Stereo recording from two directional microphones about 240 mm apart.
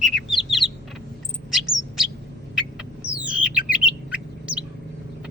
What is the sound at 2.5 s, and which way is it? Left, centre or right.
Bird, centre.